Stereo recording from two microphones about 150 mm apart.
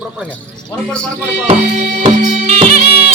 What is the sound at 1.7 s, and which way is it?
Music, 60° right (ahead or behind).